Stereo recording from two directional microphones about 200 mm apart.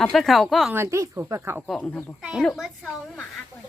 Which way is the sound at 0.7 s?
15° right (ahead or behind).